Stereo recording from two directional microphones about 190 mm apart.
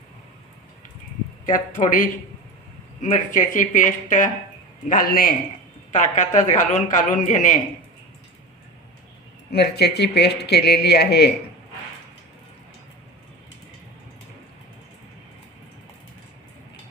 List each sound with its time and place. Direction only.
1.5 s a man's voice: 45° left (ahead or behind)
9.5 s speech: 60° left (ahead or behind)